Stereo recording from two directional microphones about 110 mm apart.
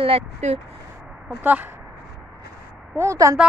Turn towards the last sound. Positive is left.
turn(degrees=-30)  # may be behind; listen again after turning